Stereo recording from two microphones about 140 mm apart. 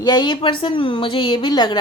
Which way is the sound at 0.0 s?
30° left (ahead or behind).